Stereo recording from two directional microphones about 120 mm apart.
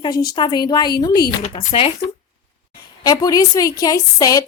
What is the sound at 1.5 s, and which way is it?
Speech, 50° left (ahead or behind).